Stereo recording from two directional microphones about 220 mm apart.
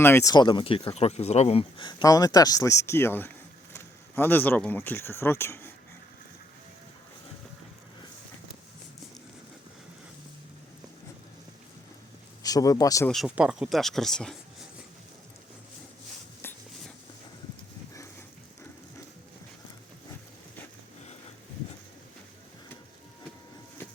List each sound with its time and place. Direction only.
0.0 s speech: 10° left (ahead or behind)
12.4 s speech: 15° left (ahead or behind)
13.1 s speech: centre (ahead or behind)
16.4 s writing: 10° left (ahead or behind)